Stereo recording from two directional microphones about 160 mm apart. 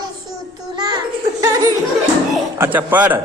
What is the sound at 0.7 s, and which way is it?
Music, 25° right (ahead or behind).